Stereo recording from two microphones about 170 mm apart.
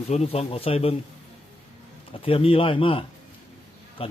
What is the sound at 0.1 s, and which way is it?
Speech, 40° left (ahead or behind).